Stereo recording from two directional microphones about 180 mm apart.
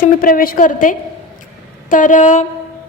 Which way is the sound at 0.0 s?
50° left (ahead or behind).